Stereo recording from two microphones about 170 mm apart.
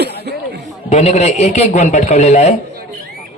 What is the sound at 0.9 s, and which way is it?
A man's voice, 40° left (ahead or behind).